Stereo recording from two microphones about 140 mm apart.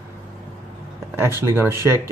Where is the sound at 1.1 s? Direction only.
15° right (ahead or behind).